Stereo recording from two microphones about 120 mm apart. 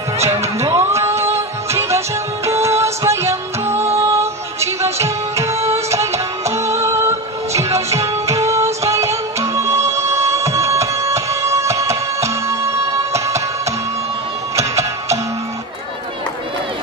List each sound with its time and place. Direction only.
0.6 s music: 25° right (ahead or behind)